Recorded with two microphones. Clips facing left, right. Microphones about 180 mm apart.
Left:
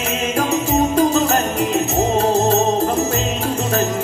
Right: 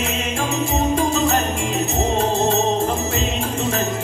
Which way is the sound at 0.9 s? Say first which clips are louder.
Left 4 dB; 40° left (ahead or behind).